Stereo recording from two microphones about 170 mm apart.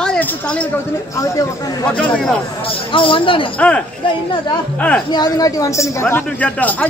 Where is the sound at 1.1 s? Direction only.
20° left (ahead or behind).